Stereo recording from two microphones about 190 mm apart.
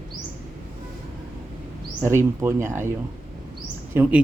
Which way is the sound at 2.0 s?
15° right (ahead or behind).